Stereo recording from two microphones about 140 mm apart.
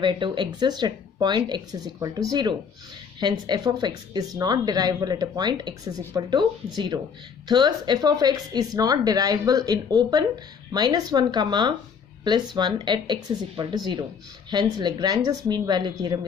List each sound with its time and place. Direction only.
0.0 s speech: 35° right (ahead or behind)